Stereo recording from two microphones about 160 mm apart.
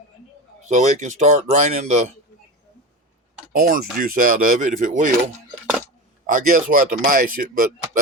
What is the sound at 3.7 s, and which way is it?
Speech, 65° right (ahead or behind).